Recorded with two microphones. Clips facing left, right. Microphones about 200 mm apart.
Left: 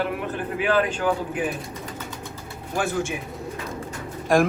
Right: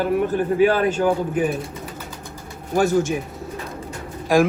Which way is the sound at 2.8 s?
40° right (ahead or behind).